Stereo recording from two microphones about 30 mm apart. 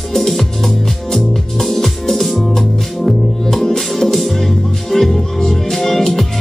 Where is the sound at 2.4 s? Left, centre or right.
Centre.